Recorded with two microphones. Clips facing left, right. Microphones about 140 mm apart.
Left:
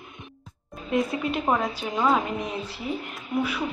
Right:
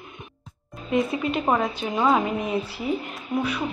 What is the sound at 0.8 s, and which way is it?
Speech, centre (ahead or behind).